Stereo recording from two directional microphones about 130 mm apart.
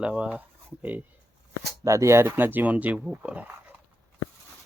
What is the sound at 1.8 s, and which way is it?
Speech, 25° right (ahead or behind).